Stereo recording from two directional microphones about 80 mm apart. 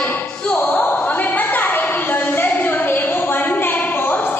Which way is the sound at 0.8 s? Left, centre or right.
Left.